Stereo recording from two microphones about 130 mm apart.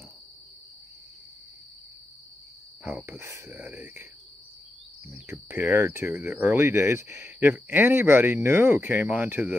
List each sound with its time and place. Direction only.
2.8 s speech: 15° right (ahead or behind)